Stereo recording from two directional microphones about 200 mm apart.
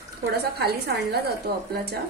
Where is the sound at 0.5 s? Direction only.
55° right (ahead or behind).